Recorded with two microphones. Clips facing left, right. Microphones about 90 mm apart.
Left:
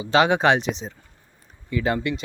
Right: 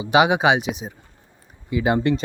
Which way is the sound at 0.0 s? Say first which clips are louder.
Right 1 dB; 15° right (ahead or behind).